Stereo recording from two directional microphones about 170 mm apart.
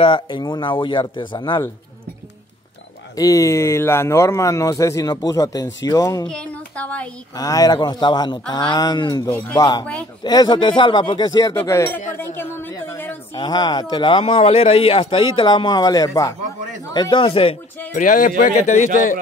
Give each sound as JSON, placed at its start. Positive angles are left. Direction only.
{"t": 0.0, "sound": "speech", "side_deg": 30}
{"t": 3.2, "sound": "speech", "side_deg": 20}
{"t": 6.2, "sound": "a woman's voice", "side_deg": 5}
{"t": 7.3, "sound": "speech", "side_deg": 20}
{"t": 9.3, "sound": "speech", "side_deg": 10}
{"t": 9.6, "sound": "speech", "side_deg": 20}
{"t": 12.2, "sound": "a sound", "side_deg": 10}
{"t": 13.3, "sound": "speech", "side_deg": 25}
{"t": 17.9, "sound": "speech", "side_deg": 50}